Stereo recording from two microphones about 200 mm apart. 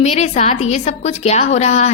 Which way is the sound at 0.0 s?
35° left (ahead or behind).